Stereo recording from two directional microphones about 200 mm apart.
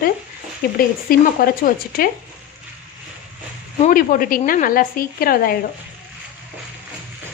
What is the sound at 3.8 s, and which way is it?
A woman's voice, 45° left (ahead or behind).